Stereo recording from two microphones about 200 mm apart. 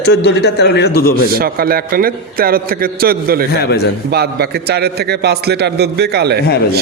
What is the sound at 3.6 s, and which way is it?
Speech, 55° left (ahead or behind).